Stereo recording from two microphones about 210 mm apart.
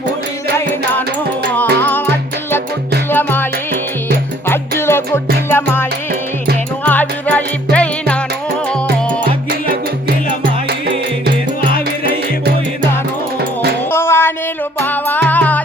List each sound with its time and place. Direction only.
1.8 s music: 10° left (ahead or behind)
3.1 s music: 10° left (ahead or behind)
4.8 s music: 10° left (ahead or behind)
9.5 s music: 45° right (ahead or behind)
13.4 s music: 50° right (ahead or behind)
13.9 s a sound: 10° left (ahead or behind)
14.8 s music: 10° left (ahead or behind)